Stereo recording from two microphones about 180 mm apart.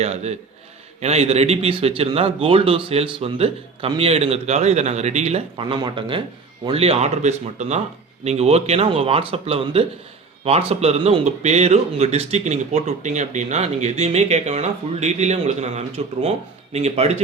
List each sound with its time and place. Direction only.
0.0 s speech: 35° right (ahead or behind)